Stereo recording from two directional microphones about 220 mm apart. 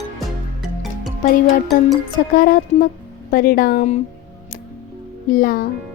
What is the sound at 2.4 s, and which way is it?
A woman's voice, 40° left (ahead or behind).